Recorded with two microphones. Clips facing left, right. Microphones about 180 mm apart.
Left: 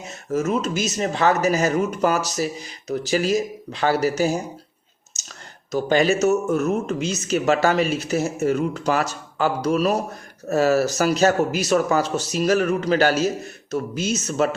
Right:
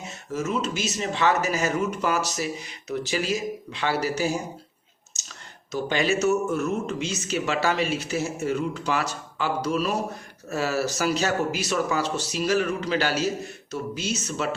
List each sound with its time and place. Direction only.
0.3 s speech: 45° left (ahead or behind)
5.7 s speech: 45° left (ahead or behind)